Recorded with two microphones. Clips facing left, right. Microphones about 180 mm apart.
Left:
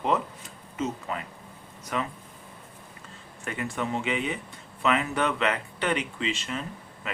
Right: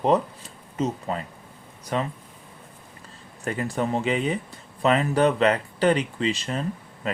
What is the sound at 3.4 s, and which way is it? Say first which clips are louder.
Speech: right 5 dB; 35° right (ahead or behind).